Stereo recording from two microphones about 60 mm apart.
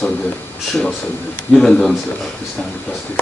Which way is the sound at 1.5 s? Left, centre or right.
Centre.